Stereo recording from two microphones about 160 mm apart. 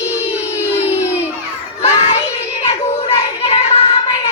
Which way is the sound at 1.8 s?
40° left (ahead or behind).